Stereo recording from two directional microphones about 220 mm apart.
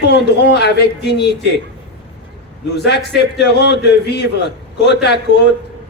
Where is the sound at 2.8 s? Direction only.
50° left (ahead or behind).